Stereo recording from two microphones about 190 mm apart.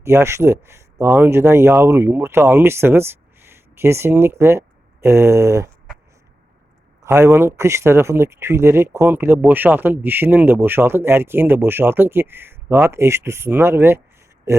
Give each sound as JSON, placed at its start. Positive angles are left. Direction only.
{"t": 0.0, "sound": "speech", "side_deg": -15}
{"t": 7.0, "sound": "speech", "side_deg": -15}
{"t": 14.5, "sound": "a sound", "side_deg": -15}